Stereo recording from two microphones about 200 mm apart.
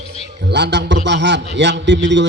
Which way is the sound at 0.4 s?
60° right (ahead or behind).